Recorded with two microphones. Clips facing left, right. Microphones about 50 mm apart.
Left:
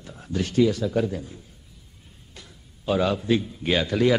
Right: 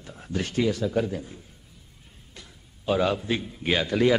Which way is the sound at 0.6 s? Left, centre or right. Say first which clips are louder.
Left 2 dB; centre.